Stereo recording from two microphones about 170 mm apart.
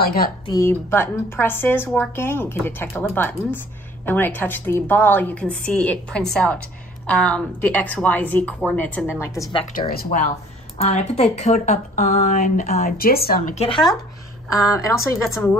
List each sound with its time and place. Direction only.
0.0 s a woman's voice: 60° left (ahead or behind)
0.5 s a woman's voice: 15° left (ahead or behind)
9.8 s a woman's voice: 60° left (ahead or behind)
10.8 s a woman's voice: 40° left (ahead or behind); by 13.4 s 60° left (ahead or behind)
13.6 s speech: 30° left (ahead or behind)
14.5 s a woman's voice: 20° left (ahead or behind)